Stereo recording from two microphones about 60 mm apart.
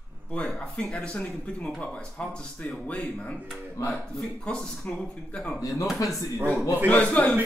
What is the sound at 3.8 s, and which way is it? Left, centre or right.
Speech, left.